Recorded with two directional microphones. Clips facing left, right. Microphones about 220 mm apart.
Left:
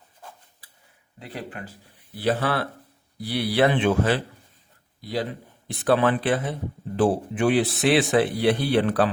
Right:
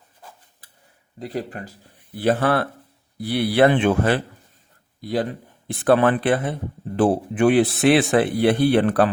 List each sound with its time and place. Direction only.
1.2 s speech: 40° right (ahead or behind)
2.1 s speech: 50° right (ahead or behind)